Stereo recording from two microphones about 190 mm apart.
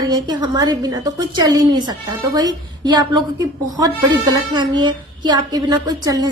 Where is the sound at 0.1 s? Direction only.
25° right (ahead or behind).